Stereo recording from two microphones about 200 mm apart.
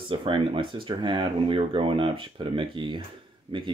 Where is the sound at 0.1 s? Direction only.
25° right (ahead or behind).